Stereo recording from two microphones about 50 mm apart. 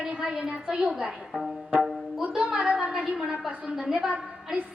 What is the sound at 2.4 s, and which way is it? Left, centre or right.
Speech, centre.